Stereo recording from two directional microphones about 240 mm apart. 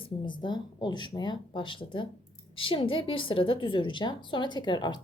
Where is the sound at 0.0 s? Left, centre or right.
Centre.